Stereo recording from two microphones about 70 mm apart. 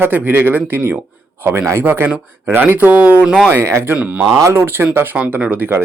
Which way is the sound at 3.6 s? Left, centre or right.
Right.